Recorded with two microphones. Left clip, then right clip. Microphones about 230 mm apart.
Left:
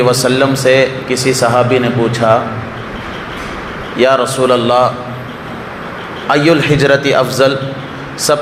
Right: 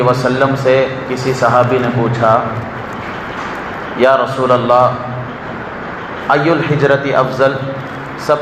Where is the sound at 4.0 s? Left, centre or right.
Left.